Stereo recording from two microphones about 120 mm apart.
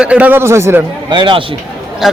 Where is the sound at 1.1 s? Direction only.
45° right (ahead or behind).